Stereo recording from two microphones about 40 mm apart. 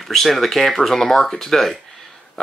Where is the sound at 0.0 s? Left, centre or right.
Centre.